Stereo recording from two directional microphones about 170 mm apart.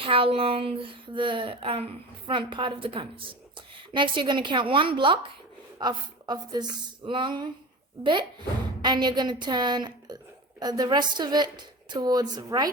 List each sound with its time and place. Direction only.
0.0 s a woman's voice: 30° right (ahead or behind)
8.8 s a woman's voice: 25° right (ahead or behind)